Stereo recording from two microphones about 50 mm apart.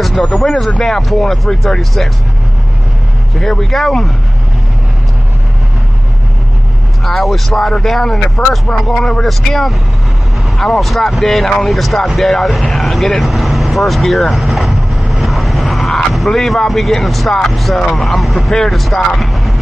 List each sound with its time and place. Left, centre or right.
0.3 s speech: centre
3.3 s speech: centre
7.1 s speech: centre
8.2 s speech: centre
8.7 s speech: centre